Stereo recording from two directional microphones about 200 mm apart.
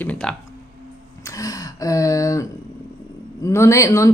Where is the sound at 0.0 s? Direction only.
5° left (ahead or behind).